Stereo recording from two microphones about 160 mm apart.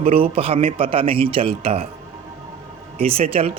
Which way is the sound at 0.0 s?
35° right (ahead or behind).